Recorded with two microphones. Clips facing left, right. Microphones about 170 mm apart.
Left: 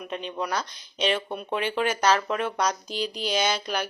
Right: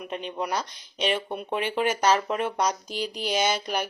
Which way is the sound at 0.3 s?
15° right (ahead or behind).